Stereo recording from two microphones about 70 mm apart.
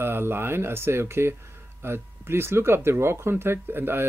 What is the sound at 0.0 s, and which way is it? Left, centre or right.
Speech, right.